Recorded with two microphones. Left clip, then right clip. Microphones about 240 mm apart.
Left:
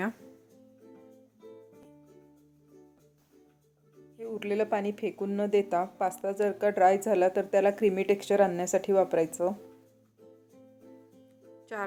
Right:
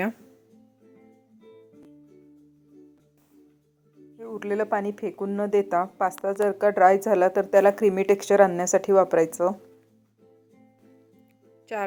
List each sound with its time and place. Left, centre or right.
4.2 s speech: centre
11.7 s speech: centre